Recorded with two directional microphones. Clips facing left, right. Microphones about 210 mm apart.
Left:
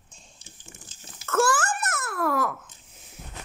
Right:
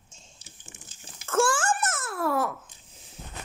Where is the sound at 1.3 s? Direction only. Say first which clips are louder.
Even; 30° right (ahead or behind).